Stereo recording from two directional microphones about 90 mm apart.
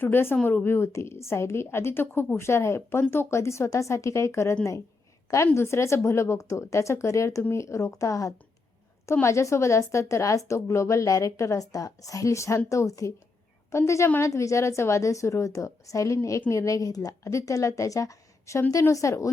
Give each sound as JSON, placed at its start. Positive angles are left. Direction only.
{"t": 0.0, "sound": "a woman's voice", "side_deg": 25}
{"t": 5.5, "sound": "a woman's voice", "side_deg": 30}